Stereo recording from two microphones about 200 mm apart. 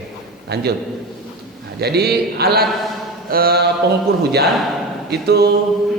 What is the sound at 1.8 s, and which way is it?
A man's voice, 55° right (ahead or behind).